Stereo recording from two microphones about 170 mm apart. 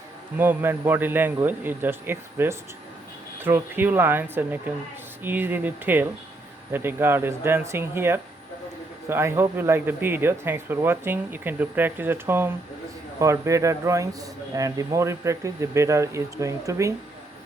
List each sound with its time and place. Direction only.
0.3 s a man's voice: 15° right (ahead or behind)